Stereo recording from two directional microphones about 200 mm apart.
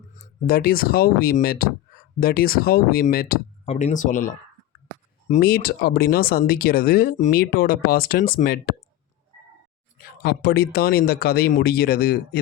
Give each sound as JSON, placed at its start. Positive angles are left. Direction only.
{"t": 0.4, "sound": "speech", "side_deg": 50}
{"t": 3.7, "sound": "speech", "side_deg": 35}
{"t": 5.4, "sound": "speech", "side_deg": 50}
{"t": 10.2, "sound": "speech", "side_deg": 50}